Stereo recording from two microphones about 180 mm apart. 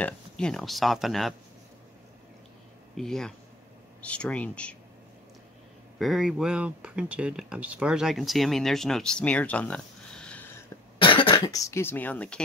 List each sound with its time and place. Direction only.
0.0 s speech: 5° left (ahead or behind)
3.0 s speech: 5° left (ahead or behind)
5.9 s speech: centre (ahead or behind)
11.0 s speech: 25° left (ahead or behind); by 12.4 s 10° left (ahead or behind)